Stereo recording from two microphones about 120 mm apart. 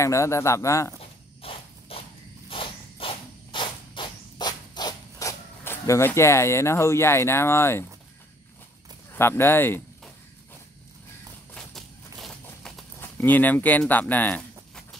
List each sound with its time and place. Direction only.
0.0 s speech: 25° left (ahead or behind)
1.4 s a sound: 50° left (ahead or behind); by 5.3 s 35° left (ahead or behind)
5.6 s speech: 20° left (ahead or behind)
9.1 s speech: 20° left (ahead or behind)
11.5 s a sound: 5° left (ahead or behind)
13.0 s speech: 15° left (ahead or behind)